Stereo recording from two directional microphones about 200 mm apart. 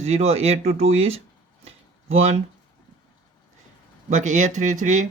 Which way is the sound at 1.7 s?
30° right (ahead or behind).